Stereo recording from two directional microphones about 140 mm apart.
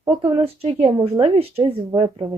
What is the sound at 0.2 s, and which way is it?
A woman's voice, 40° right (ahead or behind).